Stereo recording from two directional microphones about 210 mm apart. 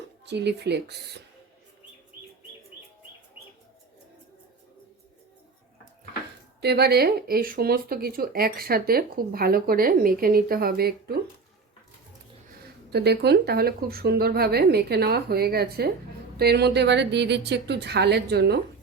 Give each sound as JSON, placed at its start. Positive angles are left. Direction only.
{"t": 0.3, "sound": "speech", "side_deg": -55}
{"t": 6.6, "sound": "speech", "side_deg": -50}
{"t": 12.9, "sound": "speech", "side_deg": -50}